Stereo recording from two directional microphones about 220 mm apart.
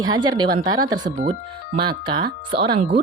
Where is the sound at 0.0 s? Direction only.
15° right (ahead or behind).